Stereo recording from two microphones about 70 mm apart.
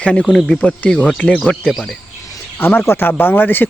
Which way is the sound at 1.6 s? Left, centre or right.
Centre.